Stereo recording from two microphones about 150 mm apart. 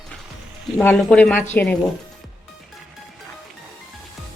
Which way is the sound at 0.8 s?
10° left (ahead or behind).